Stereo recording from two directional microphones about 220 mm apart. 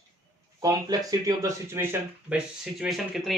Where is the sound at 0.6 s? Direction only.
15° right (ahead or behind).